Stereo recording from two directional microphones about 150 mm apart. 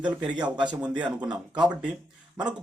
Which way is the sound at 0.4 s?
30° right (ahead or behind).